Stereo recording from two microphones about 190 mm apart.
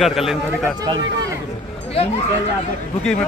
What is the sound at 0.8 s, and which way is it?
Speech, 25° right (ahead or behind).